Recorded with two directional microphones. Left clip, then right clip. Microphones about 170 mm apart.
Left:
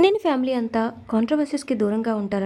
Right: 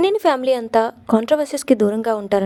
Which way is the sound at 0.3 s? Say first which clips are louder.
Right 7 dB; 40° right (ahead or behind).